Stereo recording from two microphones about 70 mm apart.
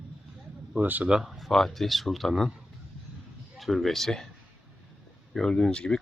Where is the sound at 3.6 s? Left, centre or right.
Centre.